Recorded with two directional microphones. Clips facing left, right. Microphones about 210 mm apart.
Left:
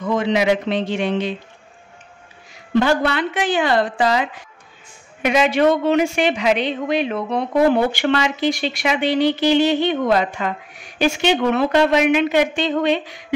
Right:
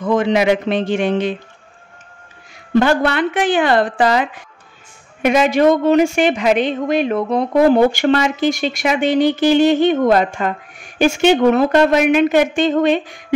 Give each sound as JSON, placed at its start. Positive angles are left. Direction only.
{"t": 0.1, "sound": "a woman's voice", "side_deg": -50}
{"t": 2.7, "sound": "a woman's voice", "side_deg": -55}